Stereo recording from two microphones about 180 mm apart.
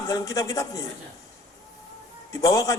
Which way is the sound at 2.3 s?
20° left (ahead or behind).